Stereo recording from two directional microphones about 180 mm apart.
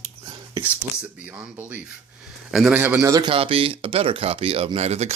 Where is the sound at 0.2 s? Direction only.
15° right (ahead or behind).